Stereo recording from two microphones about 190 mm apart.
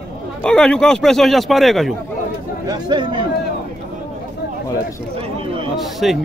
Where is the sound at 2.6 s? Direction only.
20° right (ahead or behind).